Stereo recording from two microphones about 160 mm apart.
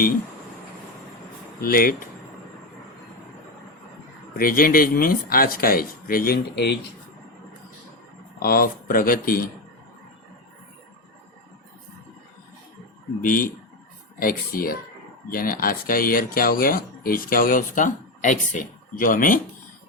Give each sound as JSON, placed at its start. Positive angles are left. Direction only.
{"t": 1.6, "sound": "speech", "side_deg": 65}
{"t": 4.4, "sound": "speech", "side_deg": 65}
{"t": 8.4, "sound": "speech", "side_deg": 65}
{"t": 13.2, "sound": "speech", "side_deg": 60}